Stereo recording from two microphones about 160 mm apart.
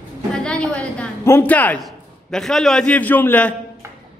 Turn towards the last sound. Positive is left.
turn(degrees=10)  # may be behind; listen again after turning